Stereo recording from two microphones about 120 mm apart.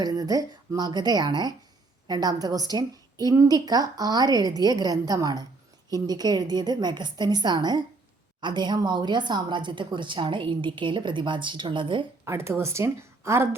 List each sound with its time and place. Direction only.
0.0 s a woman's voice: 30° right (ahead or behind)
12.2 s a woman's voice: 25° right (ahead or behind)